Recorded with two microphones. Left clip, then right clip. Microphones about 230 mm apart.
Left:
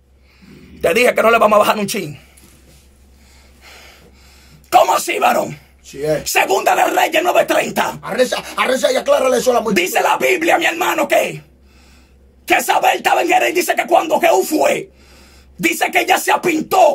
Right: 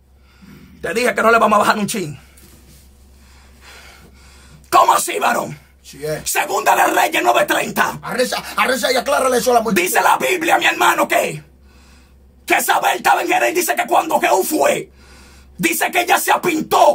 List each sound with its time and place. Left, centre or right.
0.7 s a man's voice: centre
4.6 s speech: centre
12.4 s speech: centre